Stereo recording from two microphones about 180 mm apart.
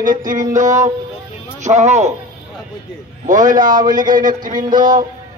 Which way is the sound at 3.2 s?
45° right (ahead or behind).